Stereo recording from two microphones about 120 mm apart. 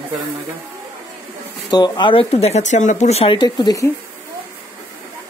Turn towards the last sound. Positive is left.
turn(degrees=35)  # may be behind; listen again after turning